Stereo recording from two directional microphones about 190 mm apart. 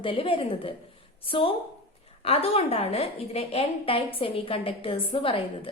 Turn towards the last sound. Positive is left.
turn(degrees=30)  # may be behind; listen again after turning